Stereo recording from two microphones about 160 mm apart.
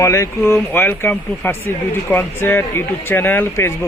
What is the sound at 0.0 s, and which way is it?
Speech, 20° left (ahead or behind).